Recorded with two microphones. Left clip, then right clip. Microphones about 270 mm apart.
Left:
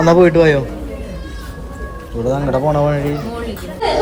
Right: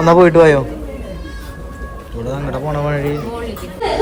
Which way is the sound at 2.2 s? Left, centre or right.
Left.